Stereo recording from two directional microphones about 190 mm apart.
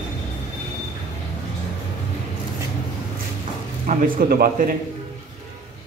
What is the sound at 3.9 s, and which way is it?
Speech, 50° right (ahead or behind).